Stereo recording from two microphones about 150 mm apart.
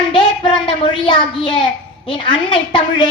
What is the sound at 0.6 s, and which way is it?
A woman's voice, 30° left (ahead or behind).